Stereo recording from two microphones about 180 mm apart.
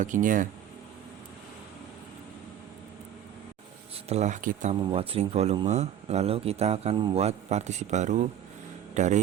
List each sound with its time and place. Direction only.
0.0 s speech: 45° right (ahead or behind)
4.1 s speech: 40° right (ahead or behind)
4.7 s a man's voice: 30° right (ahead or behind)